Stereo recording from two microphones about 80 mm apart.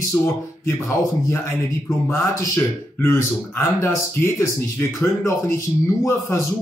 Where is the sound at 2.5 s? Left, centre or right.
Left.